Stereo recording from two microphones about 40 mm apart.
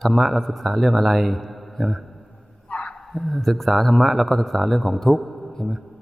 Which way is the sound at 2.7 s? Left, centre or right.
Left.